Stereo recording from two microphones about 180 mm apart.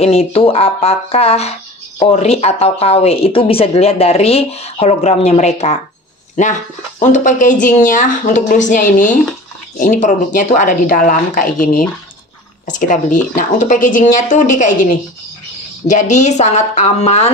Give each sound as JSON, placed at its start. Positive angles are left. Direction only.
{"t": 0.3, "sound": "speech", "side_deg": 30}
{"t": 15.9, "sound": "speech", "side_deg": 40}